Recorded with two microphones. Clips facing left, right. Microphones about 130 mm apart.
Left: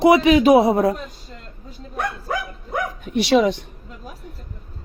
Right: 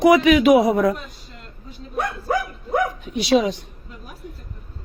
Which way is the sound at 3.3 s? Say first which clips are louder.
Left 1 dB; 60° left (ahead or behind).